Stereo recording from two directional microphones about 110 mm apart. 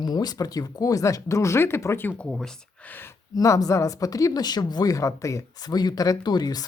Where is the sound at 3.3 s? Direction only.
30° left (ahead or behind).